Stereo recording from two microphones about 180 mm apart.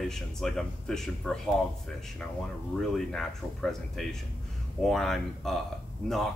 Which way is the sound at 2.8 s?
Centre (ahead or behind).